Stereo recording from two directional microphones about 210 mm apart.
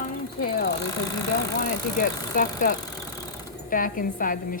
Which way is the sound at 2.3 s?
40° left (ahead or behind).